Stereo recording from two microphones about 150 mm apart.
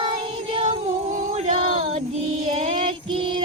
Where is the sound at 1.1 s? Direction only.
60° right (ahead or behind).